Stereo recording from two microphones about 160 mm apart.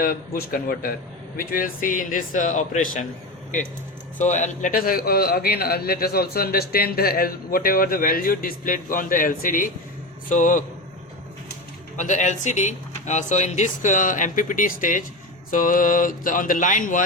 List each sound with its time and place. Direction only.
0.0 s a man's voice: 65° left (ahead or behind)
4.2 s a man's voice: 50° left (ahead or behind)
11.9 s a man's voice: 50° left (ahead or behind)